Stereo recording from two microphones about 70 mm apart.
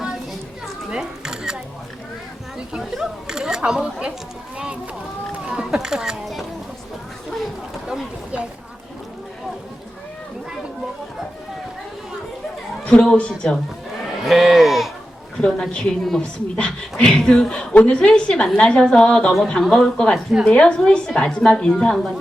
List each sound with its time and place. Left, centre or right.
0.9 s music: centre
2.6 s chatter: centre
4.5 s a sound: centre
7.9 s a sound: centre
12.8 s speech: centre
14.2 s speech: centre
15.4 s speech: centre